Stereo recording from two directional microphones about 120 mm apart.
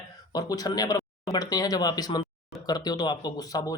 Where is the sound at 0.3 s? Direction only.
30° left (ahead or behind).